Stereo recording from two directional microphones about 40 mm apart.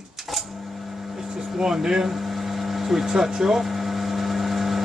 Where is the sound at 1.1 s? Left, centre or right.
Centre.